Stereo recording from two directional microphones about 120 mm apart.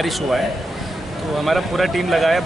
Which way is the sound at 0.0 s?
Centre (ahead or behind).